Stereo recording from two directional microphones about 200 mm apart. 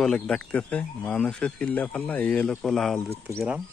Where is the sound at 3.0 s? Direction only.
15° right (ahead or behind).